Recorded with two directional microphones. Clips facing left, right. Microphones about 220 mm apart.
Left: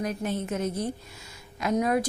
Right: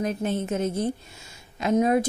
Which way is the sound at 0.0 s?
25° right (ahead or behind).